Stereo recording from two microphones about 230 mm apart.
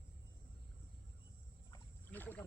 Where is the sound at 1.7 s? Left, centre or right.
Centre.